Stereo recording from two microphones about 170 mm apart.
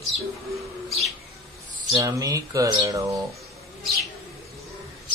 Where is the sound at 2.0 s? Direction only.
20° right (ahead or behind).